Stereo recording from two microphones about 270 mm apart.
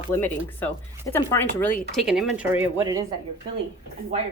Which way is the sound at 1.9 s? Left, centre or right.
Centre.